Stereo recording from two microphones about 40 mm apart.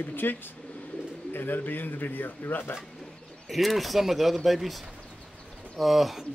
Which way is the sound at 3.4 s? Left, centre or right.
Centre.